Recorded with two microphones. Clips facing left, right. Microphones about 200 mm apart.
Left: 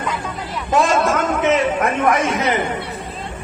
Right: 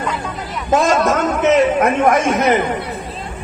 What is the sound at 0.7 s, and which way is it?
A man's voice, 40° right (ahead or behind).